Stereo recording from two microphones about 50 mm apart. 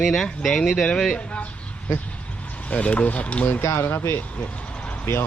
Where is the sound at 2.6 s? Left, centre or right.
Left.